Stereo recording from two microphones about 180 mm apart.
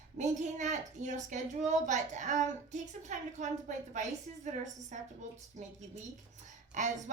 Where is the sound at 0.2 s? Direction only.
40° right (ahead or behind).